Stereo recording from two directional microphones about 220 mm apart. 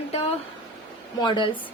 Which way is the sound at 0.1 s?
25° left (ahead or behind).